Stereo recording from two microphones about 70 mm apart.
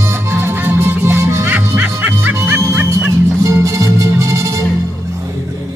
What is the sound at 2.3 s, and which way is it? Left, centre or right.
Music, right.